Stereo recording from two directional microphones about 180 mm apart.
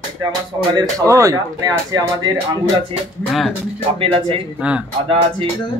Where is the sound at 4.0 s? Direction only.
30° right (ahead or behind).